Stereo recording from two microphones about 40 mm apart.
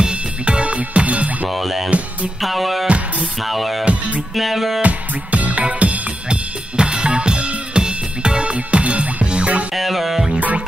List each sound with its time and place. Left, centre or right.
0.0 s music: right
1.5 s speech: centre
2.4 s music: centre
4.8 s music: right
6.8 s music: right
9.8 s music: centre